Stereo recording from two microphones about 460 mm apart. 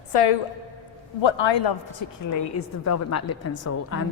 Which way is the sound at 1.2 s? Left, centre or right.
Left.